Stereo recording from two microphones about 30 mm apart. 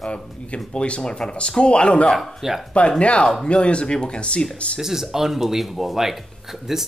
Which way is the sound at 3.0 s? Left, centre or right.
Left.